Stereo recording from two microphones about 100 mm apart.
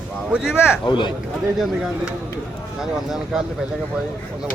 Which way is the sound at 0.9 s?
50° left (ahead or behind).